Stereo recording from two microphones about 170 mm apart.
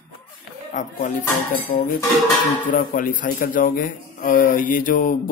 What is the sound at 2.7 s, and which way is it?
A man's voice, 55° left (ahead or behind).